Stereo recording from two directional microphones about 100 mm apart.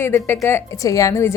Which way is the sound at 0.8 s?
35° left (ahead or behind).